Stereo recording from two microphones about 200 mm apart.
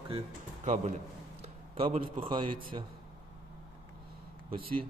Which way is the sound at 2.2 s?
25° right (ahead or behind).